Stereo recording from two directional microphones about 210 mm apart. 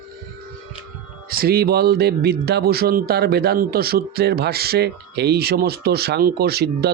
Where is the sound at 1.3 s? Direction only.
45° right (ahead or behind).